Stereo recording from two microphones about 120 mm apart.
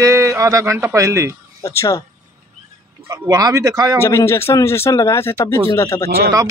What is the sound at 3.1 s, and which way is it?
Speech, 25° right (ahead or behind).